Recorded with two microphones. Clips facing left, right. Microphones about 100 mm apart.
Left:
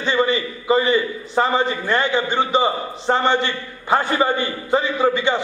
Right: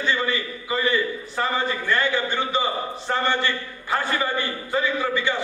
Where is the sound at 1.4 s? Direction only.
20° left (ahead or behind).